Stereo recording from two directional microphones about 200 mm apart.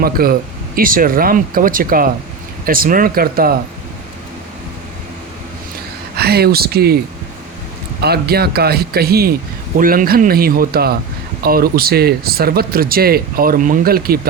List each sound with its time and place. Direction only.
0.0 s speech: 50° right (ahead or behind)
6.1 s speech: 55° right (ahead or behind)
8.0 s speech: 50° right (ahead or behind)